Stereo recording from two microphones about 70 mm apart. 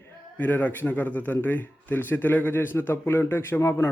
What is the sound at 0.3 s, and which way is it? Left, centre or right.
A man's voice, left.